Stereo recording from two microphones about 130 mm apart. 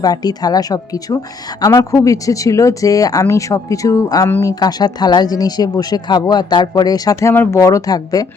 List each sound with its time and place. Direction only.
0.0 s speech: 30° left (ahead or behind)